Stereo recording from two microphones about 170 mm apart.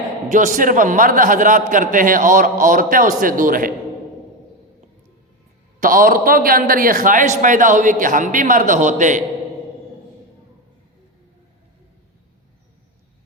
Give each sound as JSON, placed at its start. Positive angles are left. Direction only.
{"t": 0.3, "sound": "a man's voice", "side_deg": -50}
{"t": 5.8, "sound": "a man's voice", "side_deg": -55}